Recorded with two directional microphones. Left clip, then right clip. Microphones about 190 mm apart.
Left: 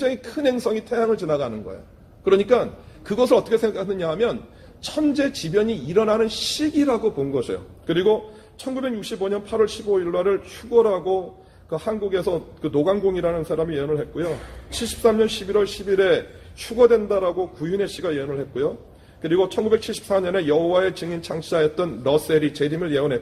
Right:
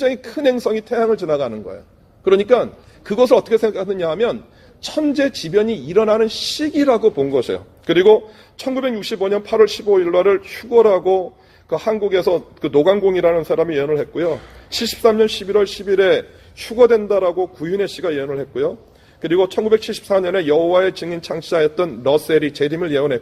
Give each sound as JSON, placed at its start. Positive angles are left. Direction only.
{"t": 0.0, "sound": "a man's voice", "side_deg": -35}